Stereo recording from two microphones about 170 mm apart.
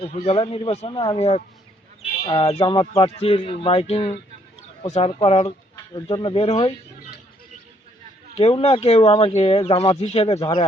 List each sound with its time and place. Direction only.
0.0 s speech: 35° left (ahead or behind)
8.4 s speech: 35° left (ahead or behind)
10.4 s speech: 25° left (ahead or behind)